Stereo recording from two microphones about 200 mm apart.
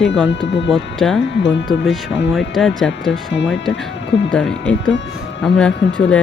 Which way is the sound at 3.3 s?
65° left (ahead or behind).